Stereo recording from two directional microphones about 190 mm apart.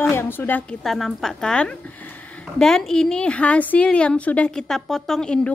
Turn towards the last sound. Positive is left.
turn(degrees=5)  # may be behind; listen again after turning